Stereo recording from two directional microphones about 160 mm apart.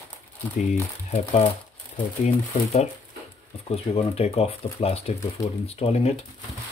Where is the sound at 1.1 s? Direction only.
40° left (ahead or behind).